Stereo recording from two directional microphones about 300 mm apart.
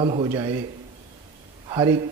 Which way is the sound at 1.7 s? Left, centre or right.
Centre.